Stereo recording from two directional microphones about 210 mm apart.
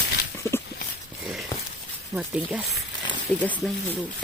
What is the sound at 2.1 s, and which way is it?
Speech, 5° right (ahead or behind).